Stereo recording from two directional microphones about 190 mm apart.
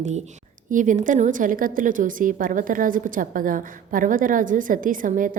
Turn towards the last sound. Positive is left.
turn(degrees=-45)  # may be behind; listen again after turning